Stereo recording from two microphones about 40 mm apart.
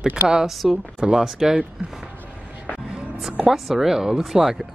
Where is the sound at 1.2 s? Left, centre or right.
Centre.